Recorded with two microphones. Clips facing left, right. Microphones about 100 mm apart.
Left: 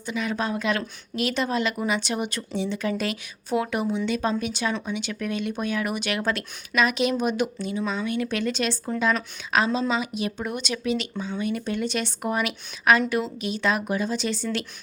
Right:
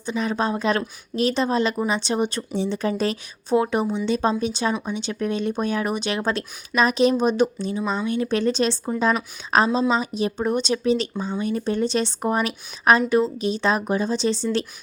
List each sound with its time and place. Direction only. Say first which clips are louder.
0.0 s speech: right 4 dB; 30° right (ahead or behind)